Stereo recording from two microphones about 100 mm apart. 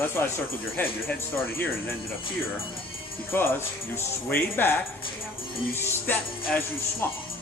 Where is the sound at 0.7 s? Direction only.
20° left (ahead or behind).